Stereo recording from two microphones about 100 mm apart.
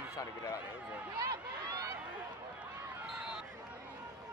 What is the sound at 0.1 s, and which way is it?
Speech, 35° left (ahead or behind).